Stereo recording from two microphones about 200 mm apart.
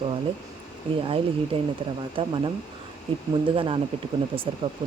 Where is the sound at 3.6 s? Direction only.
25° right (ahead or behind).